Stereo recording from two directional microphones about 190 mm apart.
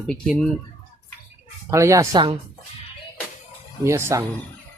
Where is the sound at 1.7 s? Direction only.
15° right (ahead or behind).